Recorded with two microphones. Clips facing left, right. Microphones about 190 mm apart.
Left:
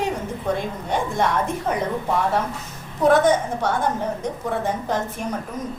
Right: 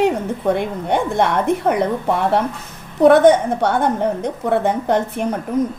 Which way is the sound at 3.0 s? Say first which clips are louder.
Right 6 dB; 65° right (ahead or behind).